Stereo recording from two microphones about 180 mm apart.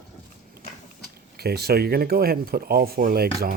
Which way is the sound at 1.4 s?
60° right (ahead or behind).